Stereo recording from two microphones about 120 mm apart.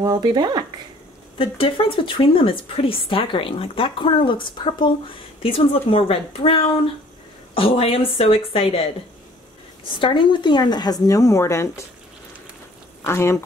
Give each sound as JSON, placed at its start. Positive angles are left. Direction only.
{"t": 0.0, "sound": "speech", "side_deg": -35}
{"t": 1.4, "sound": "a woman's voice", "side_deg": 50}
{"t": 13.0, "sound": "speech", "side_deg": 20}